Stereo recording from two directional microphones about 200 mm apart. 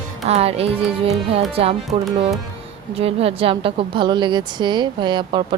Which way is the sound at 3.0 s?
30° right (ahead or behind).